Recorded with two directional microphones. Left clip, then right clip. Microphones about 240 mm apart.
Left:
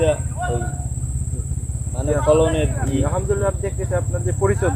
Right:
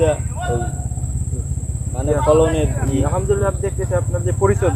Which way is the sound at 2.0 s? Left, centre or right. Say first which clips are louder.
Right 2 dB; centre.